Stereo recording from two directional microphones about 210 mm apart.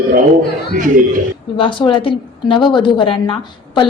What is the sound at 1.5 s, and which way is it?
A woman's voice, 25° left (ahead or behind).